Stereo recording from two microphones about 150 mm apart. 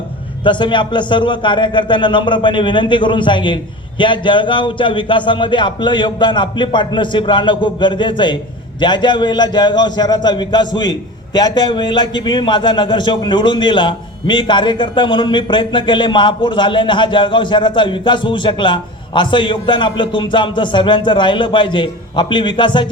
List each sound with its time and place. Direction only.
0.4 s a man's voice: 30° left (ahead or behind)